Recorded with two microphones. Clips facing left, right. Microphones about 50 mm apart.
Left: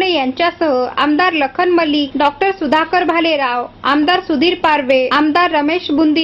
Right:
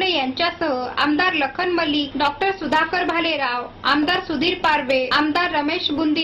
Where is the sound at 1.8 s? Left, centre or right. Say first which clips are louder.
Left 7 dB; left.